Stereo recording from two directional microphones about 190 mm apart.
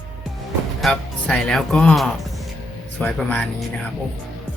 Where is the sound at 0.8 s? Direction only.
5° left (ahead or behind).